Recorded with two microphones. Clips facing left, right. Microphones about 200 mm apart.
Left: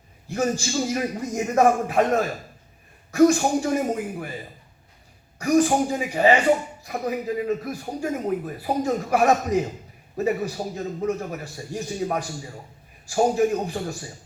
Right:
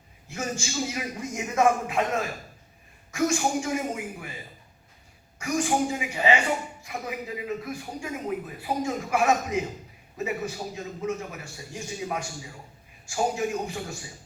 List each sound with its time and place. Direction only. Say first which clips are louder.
0.3 s speech: left 8 dB; 35° left (ahead or behind)
5.5 s speech: left 6 dB; 40° left (ahead or behind)